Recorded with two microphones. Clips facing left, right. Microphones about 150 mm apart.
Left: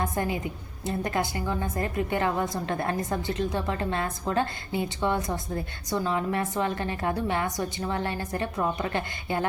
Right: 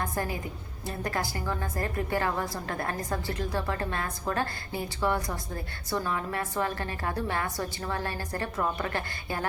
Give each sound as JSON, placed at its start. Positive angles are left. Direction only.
{"t": 0.0, "sound": "a woman's voice", "side_deg": 20}